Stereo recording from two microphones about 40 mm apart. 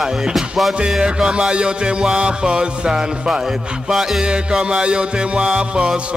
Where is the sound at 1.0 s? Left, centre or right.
Right.